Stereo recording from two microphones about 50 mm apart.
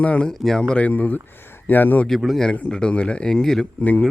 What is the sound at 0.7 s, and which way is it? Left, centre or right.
Speech, left.